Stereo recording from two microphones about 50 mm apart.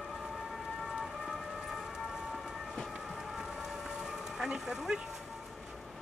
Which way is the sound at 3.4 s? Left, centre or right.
Centre.